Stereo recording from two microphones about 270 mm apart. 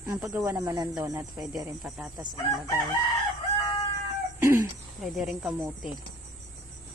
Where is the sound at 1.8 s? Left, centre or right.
Centre.